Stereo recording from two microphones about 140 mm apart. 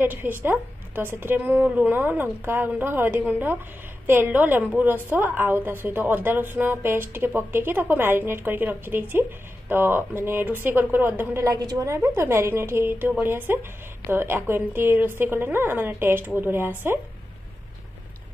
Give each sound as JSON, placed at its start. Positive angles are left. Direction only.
{"t": 0.0, "sound": "a woman's voice", "side_deg": -15}